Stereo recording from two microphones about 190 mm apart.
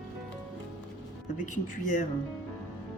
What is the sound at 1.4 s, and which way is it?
Speech, 40° left (ahead or behind).